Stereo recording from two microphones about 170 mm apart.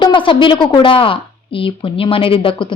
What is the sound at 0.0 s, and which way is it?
A woman's voice, 30° left (ahead or behind).